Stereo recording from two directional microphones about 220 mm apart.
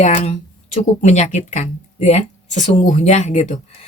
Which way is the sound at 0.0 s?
30° left (ahead or behind).